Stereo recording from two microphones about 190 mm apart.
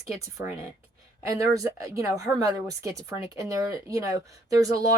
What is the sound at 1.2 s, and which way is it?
A woman's voice, 15° right (ahead or behind).